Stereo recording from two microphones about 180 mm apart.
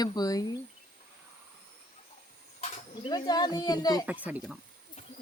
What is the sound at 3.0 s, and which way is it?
Speech, 25° left (ahead or behind).